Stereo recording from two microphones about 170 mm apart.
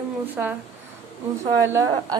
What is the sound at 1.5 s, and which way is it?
Speech, 15° right (ahead or behind).